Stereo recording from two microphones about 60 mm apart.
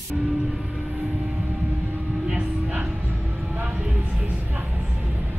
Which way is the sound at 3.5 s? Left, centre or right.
Right.